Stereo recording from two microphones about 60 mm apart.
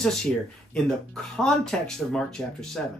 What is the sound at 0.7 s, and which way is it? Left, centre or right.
Speech, centre.